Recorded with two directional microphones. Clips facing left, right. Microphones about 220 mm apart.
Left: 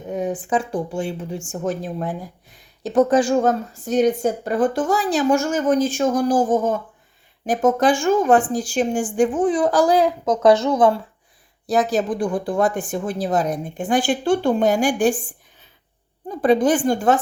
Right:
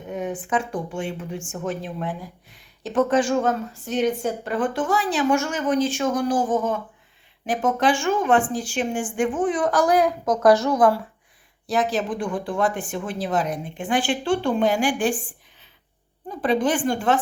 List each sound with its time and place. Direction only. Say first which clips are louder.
0.1 s a woman's voice: left 3 dB; 35° left (ahead or behind)
11.7 s a woman's voice: left 4 dB; 40° left (ahead or behind)
16.4 s a woman's voice: left 5 dB; 40° left (ahead or behind)